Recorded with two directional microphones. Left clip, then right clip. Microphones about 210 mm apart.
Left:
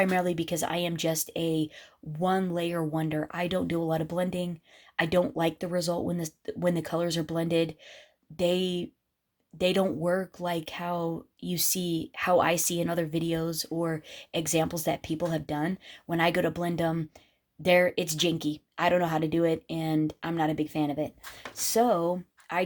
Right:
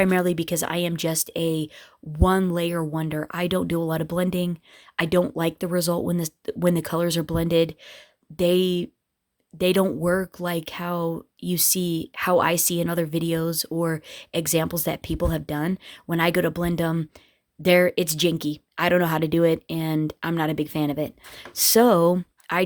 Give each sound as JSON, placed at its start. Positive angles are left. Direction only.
{"t": 0.0, "sound": "speech", "side_deg": -35}